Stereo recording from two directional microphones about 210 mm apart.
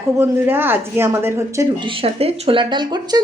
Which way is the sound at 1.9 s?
25° right (ahead or behind).